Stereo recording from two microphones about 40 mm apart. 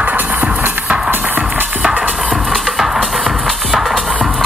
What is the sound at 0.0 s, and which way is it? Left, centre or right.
Music, right.